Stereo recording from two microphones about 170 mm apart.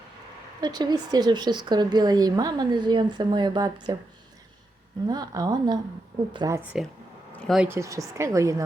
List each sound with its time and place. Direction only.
0.6 s a woman's voice: 25° right (ahead or behind)
5.0 s a woman's voice: 25° right (ahead or behind)
7.3 s a sound: 5° left (ahead or behind)
7.6 s speech: 15° right (ahead or behind)